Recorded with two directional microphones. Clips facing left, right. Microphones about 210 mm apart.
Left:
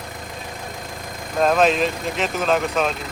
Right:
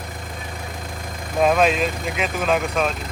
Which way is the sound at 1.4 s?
5° right (ahead or behind).